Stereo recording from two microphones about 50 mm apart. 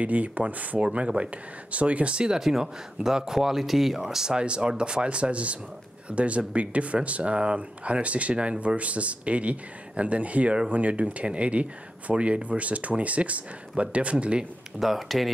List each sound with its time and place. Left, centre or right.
0.0 s speech: right
14.8 s speech: centre